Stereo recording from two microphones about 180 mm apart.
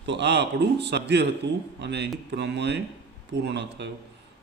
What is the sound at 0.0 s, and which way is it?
Speech, 75° right (ahead or behind).